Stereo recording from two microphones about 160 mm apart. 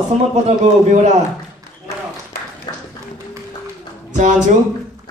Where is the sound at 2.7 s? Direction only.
25° left (ahead or behind).